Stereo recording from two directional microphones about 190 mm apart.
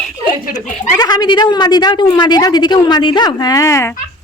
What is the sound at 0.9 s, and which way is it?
A woman's voice, 20° left (ahead or behind).